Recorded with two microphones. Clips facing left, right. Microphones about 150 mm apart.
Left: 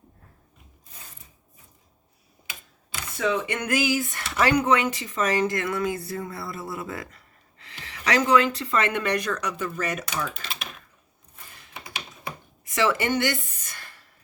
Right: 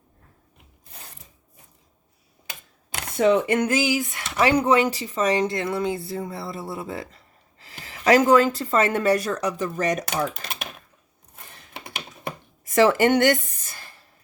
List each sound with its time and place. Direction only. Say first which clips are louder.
2.9 s camera: right 7 dB; 60° right (ahead or behind)
3.7 s speech: right 2 dB; 20° right (ahead or behind)
4.5 s speech: right 3 dB; 30° right (ahead or behind)
7.6 s a woman's voice: right 7 dB; 40° right (ahead or behind)
11.7 s computer keyboard: right 2 dB; 55° right (ahead or behind)
12.7 s speech: right 6 dB; 50° right (ahead or behind)
13.6 s a sound: right 1 dB; 30° right (ahead or behind)